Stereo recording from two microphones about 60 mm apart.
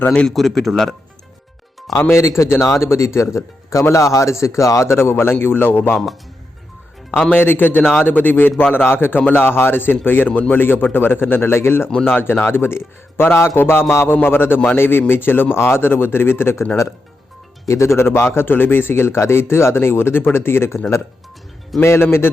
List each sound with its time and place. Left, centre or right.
0.1 s a man's voice: centre
2.0 s speech: left
7.3 s speech: left
17.7 s speech: left